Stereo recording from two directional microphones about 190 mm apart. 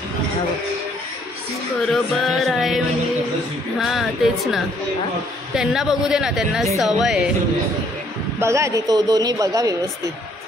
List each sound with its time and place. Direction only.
1.9 s speech: centre (ahead or behind)
3.8 s speech: centre (ahead or behind)
8.4 s speech: 15° right (ahead or behind)